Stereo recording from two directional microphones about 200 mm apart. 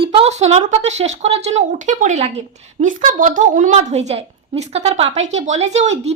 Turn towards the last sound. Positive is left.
turn(degrees=-35)  # may be behind; listen again after turning